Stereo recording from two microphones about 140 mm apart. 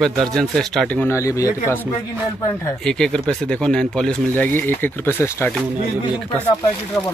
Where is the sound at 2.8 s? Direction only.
5° left (ahead or behind).